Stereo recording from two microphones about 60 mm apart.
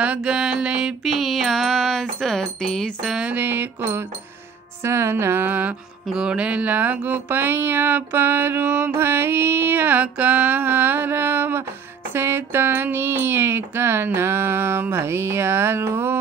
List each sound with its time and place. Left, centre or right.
0.0 s music: centre
1.0 s music: centre
3.3 s music: right
4.8 s a woman's voice: right
5.1 s music: right
6.1 s music: centre; by 15.9 s right